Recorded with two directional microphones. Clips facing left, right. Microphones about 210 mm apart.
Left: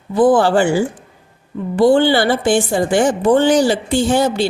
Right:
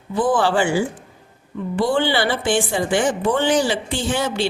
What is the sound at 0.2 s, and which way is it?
A woman's voice, 40° left (ahead or behind).